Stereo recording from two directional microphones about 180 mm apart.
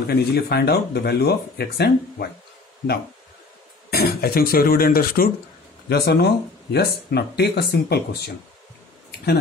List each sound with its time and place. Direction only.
0.0 s speech: 60° left (ahead or behind)
3.9 s speech: 60° left (ahead or behind)